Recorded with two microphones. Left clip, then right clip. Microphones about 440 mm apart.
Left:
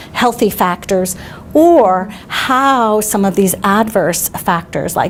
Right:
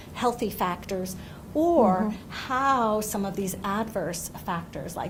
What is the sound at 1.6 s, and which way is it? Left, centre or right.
A woman's voice, left.